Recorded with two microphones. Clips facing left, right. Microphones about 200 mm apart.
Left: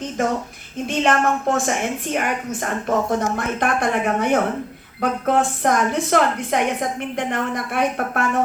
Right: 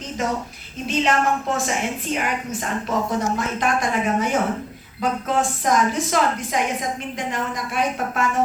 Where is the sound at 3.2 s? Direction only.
55° left (ahead or behind).